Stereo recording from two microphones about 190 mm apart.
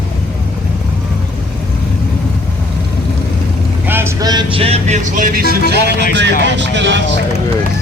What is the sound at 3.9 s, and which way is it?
Vehicle, 10° right (ahead or behind).